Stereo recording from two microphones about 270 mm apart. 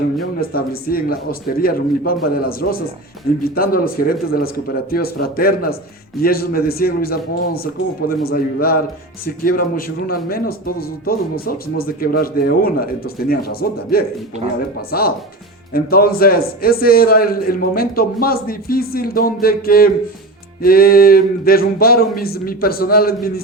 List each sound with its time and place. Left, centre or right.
0.5 s speech: left